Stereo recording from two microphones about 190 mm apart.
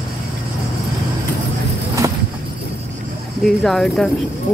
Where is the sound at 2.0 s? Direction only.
20° right (ahead or behind).